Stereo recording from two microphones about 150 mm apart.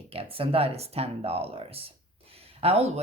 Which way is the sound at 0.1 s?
40° right (ahead or behind).